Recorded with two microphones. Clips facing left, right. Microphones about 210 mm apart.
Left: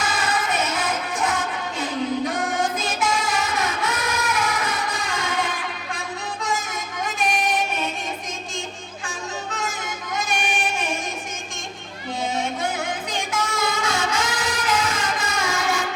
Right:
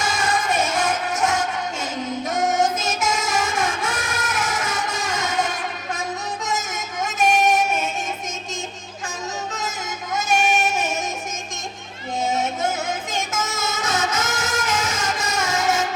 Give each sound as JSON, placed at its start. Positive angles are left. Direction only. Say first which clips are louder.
{"t": 0.0, "sound": "music", "louder": "right 1 dB", "side_deg": -45}
{"t": 10.5, "sound": "music", "louder": "right 4 dB", "side_deg": -45}
{"t": 12.2, "sound": "music", "louder": "right 3 dB", "side_deg": -45}